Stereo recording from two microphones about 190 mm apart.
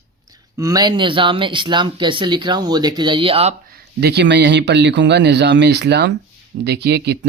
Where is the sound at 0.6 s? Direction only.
20° right (ahead or behind).